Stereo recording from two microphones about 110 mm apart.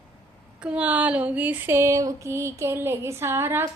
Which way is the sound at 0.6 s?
10° right (ahead or behind).